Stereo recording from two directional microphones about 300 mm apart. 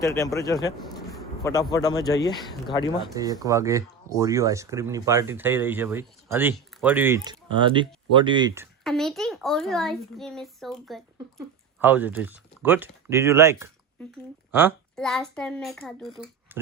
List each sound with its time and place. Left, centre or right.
0.0 s speech: centre
1.7 s speech: centre
3.2 s speech: centre
8.8 s a child's voice: centre
14.0 s a child's voice: centre